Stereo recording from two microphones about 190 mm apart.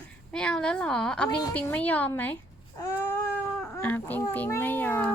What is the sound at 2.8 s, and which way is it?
Baby cry, 10° left (ahead or behind).